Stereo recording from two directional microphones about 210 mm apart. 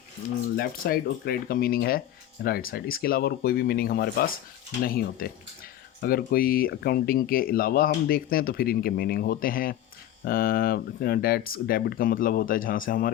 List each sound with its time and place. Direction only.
0.5 s speech: 45° left (ahead or behind)